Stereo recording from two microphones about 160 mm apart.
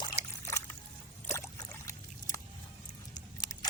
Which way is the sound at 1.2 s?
20° left (ahead or behind).